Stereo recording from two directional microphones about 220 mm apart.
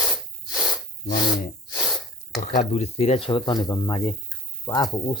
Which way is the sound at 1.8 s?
Centre (ahead or behind).